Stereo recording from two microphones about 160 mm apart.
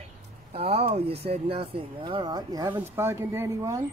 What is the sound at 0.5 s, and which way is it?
Speech, 40° right (ahead or behind).